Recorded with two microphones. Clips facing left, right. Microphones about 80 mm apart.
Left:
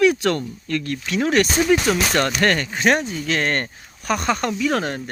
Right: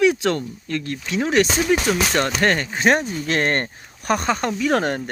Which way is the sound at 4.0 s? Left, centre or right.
Right.